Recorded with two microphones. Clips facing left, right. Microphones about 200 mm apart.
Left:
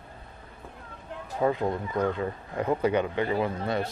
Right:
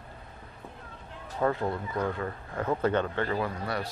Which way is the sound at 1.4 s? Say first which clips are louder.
Left 2 dB; 15° left (ahead or behind).